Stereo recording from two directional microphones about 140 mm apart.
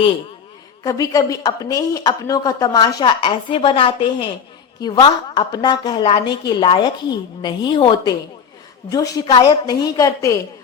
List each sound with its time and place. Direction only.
0.9 s a woman's voice: 25° left (ahead or behind)